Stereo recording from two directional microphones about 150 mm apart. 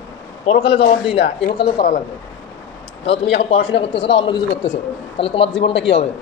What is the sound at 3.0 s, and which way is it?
A man's voice, 40° left (ahead or behind).